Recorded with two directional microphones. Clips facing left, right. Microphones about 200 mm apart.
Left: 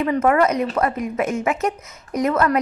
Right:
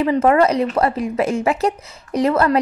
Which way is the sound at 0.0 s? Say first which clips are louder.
Right 3 dB; 25° right (ahead or behind).